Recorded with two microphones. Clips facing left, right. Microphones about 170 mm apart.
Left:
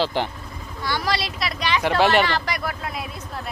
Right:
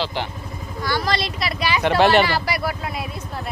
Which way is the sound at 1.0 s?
5° left (ahead or behind).